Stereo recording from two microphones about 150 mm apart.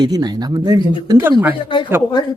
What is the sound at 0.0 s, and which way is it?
Speech, 25° right (ahead or behind).